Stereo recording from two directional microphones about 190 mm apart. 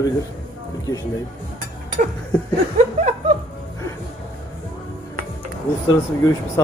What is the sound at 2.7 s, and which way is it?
Chuckle, 35° right (ahead or behind).